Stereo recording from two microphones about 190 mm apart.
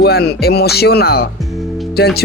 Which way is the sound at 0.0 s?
60° left (ahead or behind).